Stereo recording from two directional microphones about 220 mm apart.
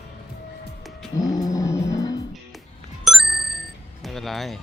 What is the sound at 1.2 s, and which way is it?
Music, 15° left (ahead or behind).